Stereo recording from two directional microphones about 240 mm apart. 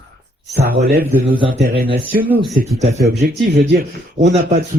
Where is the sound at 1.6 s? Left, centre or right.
Right.